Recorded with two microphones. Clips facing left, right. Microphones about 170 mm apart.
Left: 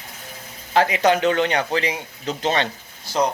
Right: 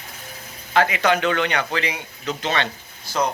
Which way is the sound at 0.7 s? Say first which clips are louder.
Left 2 dB; 35° left (ahead or behind).